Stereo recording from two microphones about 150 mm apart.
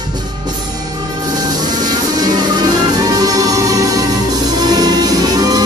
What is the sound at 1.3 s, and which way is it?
Music, 25° right (ahead or behind).